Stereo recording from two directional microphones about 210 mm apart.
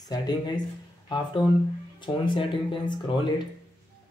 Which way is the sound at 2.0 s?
20° left (ahead or behind).